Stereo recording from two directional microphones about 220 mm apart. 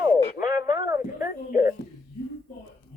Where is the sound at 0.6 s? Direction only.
15° right (ahead or behind).